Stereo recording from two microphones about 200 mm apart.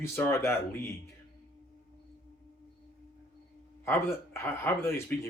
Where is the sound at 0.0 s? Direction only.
15° left (ahead or behind).